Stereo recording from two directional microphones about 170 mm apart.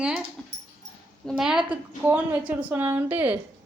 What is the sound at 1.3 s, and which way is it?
A woman's voice, 5° right (ahead or behind).